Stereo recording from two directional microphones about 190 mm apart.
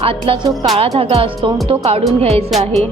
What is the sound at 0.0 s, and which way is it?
Speech, 30° right (ahead or behind).